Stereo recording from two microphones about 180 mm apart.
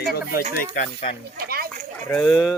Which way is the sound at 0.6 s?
50° left (ahead or behind).